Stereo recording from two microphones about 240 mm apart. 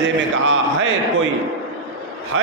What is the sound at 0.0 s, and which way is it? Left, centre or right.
Mantra, right.